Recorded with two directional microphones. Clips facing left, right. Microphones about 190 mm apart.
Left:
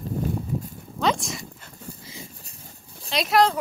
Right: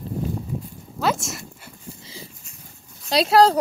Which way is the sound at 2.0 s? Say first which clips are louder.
Right 1 dB; 30° right (ahead or behind).